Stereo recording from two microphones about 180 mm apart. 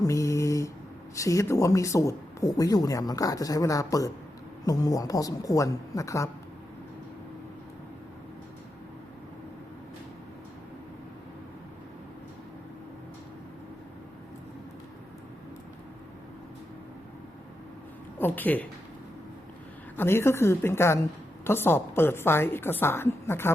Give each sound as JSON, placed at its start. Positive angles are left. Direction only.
{"t": 0.0, "sound": "mantra", "side_deg": 15}
{"t": 1.1, "sound": "speech", "side_deg": 15}
{"t": 18.2, "sound": "a woman's voice", "side_deg": 10}
{"t": 20.0, "sound": "a woman's voice", "side_deg": 15}